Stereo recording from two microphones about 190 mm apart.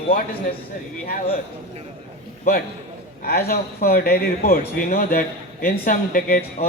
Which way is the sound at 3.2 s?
55° left (ahead or behind).